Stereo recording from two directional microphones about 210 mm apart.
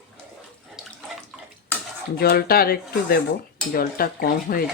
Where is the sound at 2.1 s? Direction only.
45° left (ahead or behind).